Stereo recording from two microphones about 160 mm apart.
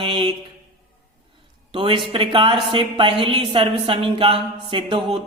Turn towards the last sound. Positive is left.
turn(degrees=-30)  # may be behind; listen again after turning